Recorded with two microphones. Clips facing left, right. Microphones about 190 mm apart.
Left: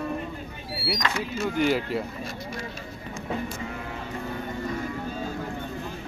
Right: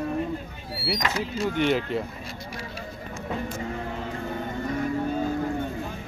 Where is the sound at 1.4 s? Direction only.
Centre (ahead or behind).